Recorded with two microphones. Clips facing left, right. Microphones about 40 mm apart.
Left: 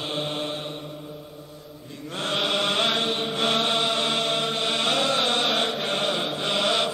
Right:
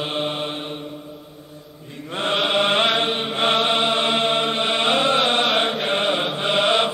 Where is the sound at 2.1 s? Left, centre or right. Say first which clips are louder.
Right 5 dB; right.